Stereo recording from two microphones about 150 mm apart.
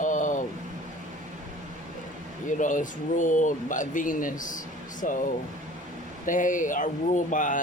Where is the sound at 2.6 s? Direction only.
60° left (ahead or behind).